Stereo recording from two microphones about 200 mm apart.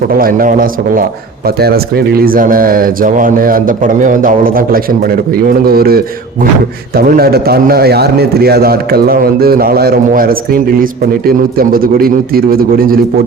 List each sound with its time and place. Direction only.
0.1 s speech: 45° right (ahead or behind)